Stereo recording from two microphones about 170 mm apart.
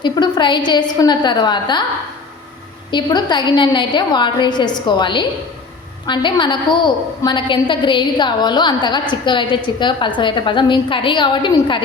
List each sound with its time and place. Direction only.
0.0 s a woman's voice: 25° left (ahead or behind)
2.9 s a woman's voice: 25° left (ahead or behind)